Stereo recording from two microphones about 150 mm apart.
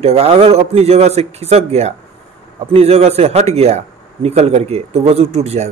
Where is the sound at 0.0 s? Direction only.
40° right (ahead or behind).